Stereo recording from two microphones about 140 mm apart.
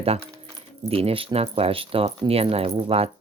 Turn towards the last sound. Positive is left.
turn(degrees=-45)  # may be behind; listen again after turning